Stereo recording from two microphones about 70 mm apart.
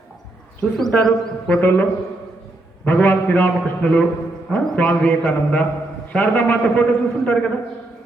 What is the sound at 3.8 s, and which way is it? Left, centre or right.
A man's voice, centre.